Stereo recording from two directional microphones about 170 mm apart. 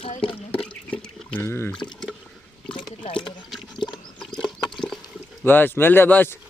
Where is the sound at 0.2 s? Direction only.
5° left (ahead or behind).